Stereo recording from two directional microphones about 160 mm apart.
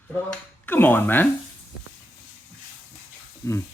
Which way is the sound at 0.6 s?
10° left (ahead or behind).